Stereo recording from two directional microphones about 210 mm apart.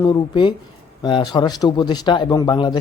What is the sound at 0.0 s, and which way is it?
Speech, 20° left (ahead or behind).